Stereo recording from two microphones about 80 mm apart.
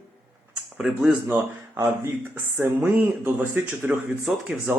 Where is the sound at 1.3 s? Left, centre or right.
Right.